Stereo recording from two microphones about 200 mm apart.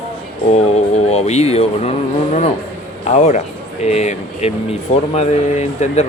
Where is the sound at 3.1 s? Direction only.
35° left (ahead or behind).